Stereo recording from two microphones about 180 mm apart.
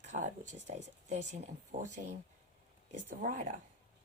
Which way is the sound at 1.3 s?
40° right (ahead or behind).